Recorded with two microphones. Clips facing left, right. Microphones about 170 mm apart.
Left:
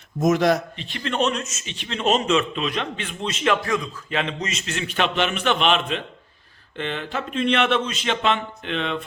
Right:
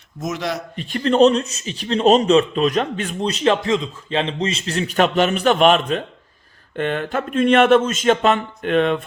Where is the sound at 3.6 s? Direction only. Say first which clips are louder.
Right 5 dB; 20° right (ahead or behind); by 9.0 s 50° right (ahead or behind).